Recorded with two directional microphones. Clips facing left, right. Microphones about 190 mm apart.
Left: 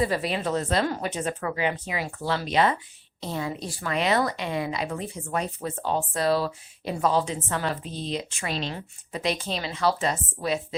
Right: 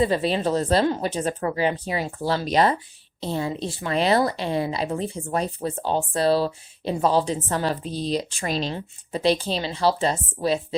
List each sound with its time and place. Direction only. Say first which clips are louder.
0.0 s speech: right 4 dB; 25° right (ahead or behind)